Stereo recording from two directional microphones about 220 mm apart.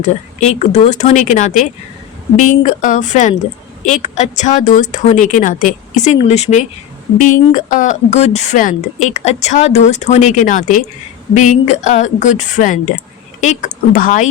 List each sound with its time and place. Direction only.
0.3 s speech: 30° left (ahead or behind)